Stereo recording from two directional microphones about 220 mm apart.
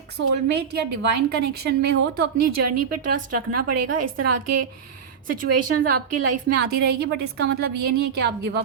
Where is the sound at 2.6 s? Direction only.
90° right.